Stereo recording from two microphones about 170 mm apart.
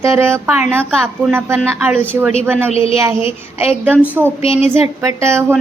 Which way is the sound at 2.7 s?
35° left (ahead or behind).